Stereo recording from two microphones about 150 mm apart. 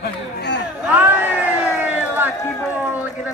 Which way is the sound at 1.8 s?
10° right (ahead or behind).